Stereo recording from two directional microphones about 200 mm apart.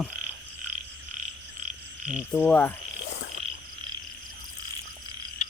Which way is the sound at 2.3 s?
5° left (ahead or behind).